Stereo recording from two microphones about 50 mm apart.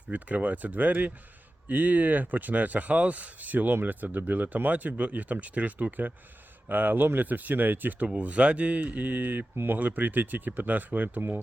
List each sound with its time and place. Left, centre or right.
0.1 s speech: right
8.0 s speech: right